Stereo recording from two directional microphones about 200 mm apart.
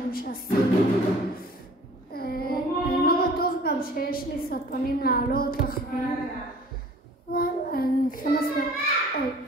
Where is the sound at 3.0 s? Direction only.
50° left (ahead or behind).